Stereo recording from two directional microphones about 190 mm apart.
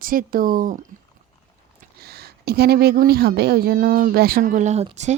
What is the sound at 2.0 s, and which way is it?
Speech, 55° right (ahead or behind).